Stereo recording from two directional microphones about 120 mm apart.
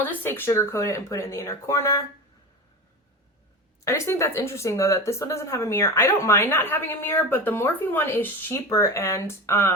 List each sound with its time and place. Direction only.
0.0 s speech: 15° left (ahead or behind)
3.8 s speech: 25° left (ahead or behind)